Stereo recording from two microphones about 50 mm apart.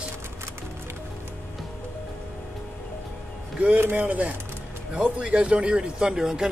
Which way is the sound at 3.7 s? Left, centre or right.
Right.